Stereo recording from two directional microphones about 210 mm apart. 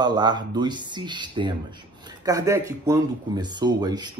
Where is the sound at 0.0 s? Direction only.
20° right (ahead or behind).